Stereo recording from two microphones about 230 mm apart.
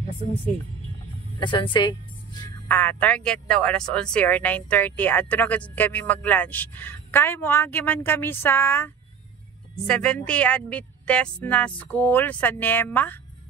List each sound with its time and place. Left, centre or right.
1.4 s speech: left
2.4 s speech: centre